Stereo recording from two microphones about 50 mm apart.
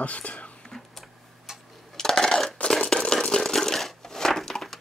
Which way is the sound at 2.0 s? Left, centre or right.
Centre.